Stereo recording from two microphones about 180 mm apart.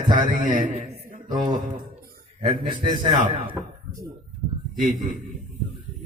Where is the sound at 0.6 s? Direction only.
50° right (ahead or behind).